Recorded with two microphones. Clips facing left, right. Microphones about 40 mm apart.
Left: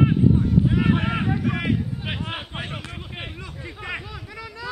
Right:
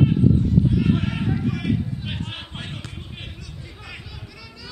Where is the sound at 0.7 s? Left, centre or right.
Left.